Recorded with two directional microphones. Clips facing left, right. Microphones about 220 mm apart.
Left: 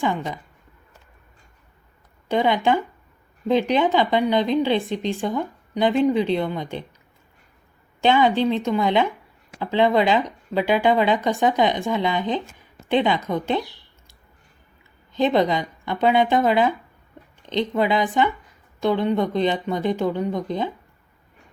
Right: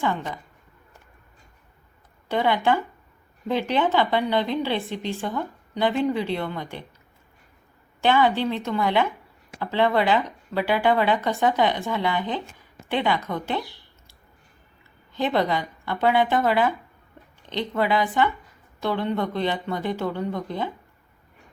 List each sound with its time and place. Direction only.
0.0 s a woman's voice: 15° left (ahead or behind)
2.3 s a woman's voice: 15° left (ahead or behind)
8.0 s a woman's voice: 20° left (ahead or behind)
15.1 s a woman's voice: 20° left (ahead or behind)